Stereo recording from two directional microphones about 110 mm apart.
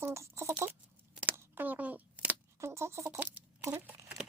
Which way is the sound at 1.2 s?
20° right (ahead or behind).